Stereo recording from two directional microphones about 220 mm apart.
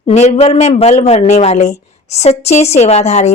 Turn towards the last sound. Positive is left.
turn(degrees=30)  # may be behind; listen again after turning